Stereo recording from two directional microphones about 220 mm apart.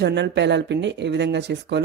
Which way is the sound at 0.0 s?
50° right (ahead or behind).